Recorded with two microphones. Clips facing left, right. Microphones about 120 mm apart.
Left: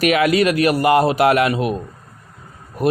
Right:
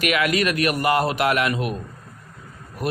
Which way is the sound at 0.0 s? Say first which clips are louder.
Left 6 dB; 35° left (ahead or behind).